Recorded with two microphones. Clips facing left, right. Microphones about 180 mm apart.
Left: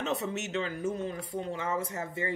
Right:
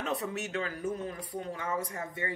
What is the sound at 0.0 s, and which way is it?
Speech, 25° left (ahead or behind).